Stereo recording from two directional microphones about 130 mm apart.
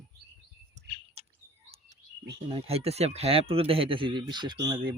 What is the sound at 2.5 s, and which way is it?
Speech, 50° right (ahead or behind).